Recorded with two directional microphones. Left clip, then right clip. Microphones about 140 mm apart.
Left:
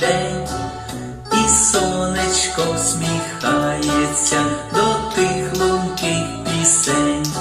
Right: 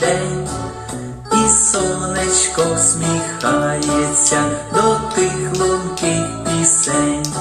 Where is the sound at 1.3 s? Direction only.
40° right (ahead or behind).